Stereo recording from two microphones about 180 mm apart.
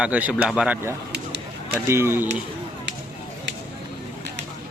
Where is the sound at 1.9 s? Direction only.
15° right (ahead or behind).